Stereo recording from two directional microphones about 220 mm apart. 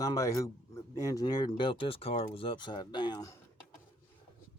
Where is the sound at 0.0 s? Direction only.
15° left (ahead or behind).